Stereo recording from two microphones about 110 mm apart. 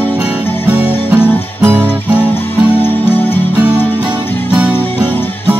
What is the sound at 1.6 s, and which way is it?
Music, 20° right (ahead or behind).